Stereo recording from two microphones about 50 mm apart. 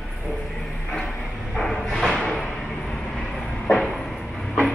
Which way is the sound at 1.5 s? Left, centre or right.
Centre.